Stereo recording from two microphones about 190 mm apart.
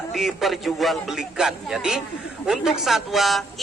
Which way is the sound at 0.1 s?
Centre (ahead or behind).